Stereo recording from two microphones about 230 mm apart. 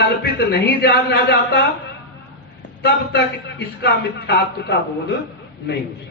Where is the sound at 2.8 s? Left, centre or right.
Left.